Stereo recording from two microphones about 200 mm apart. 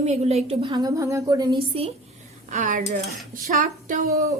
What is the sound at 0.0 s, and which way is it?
A woman's voice, 35° right (ahead or behind).